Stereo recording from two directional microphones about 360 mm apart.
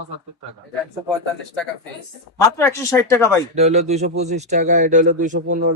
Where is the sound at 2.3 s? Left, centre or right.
Centre.